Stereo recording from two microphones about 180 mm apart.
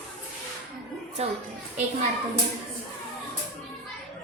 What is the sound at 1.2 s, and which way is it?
Speech, 35° right (ahead or behind).